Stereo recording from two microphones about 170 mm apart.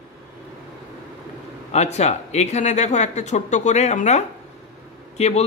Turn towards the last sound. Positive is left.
turn(degrees=40)  # may be behind; listen again after turning